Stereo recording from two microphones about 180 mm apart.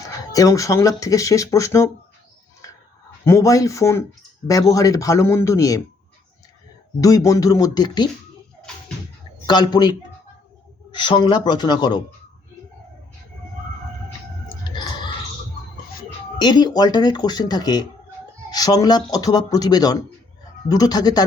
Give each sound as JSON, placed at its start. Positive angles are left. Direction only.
{"t": 0.3, "sound": "speech", "side_deg": 20}
{"t": 3.2, "sound": "speech", "side_deg": 15}
{"t": 7.0, "sound": "speech", "side_deg": 20}
{"t": 9.5, "sound": "speech", "side_deg": 25}
{"t": 16.4, "sound": "speech", "side_deg": 25}